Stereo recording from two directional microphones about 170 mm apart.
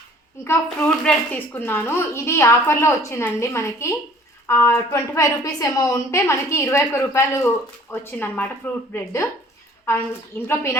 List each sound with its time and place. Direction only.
0.4 s a woman's voice: 15° left (ahead or behind)